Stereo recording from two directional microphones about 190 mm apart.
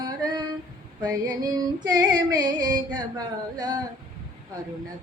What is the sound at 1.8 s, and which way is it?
Singing, 20° right (ahead or behind).